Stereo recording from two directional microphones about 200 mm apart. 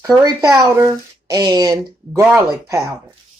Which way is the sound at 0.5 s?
15° right (ahead or behind).